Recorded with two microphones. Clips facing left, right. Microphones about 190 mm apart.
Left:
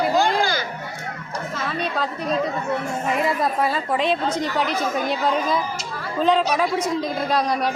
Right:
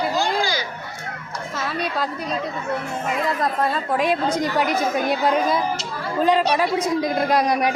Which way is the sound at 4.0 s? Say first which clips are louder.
Right 3 dB; 15° right (ahead or behind).